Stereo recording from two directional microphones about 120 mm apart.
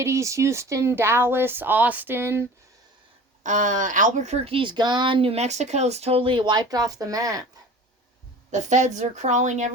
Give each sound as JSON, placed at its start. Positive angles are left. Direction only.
{"t": 0.0, "sound": "speech", "side_deg": -25}
{"t": 3.4, "sound": "speech", "side_deg": -90}
{"t": 8.4, "sound": "a woman's voice", "side_deg": -80}